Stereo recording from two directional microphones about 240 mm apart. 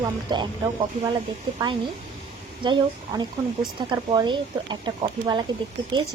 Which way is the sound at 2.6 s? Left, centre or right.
Centre.